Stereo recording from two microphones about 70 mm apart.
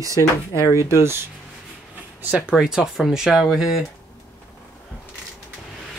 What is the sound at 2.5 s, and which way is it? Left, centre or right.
Speech, centre.